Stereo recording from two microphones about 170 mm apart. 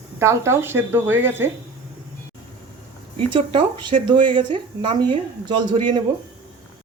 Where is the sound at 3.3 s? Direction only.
30° right (ahead or behind).